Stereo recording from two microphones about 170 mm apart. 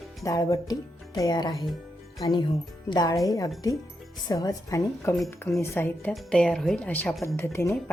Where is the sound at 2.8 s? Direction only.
25° left (ahead or behind).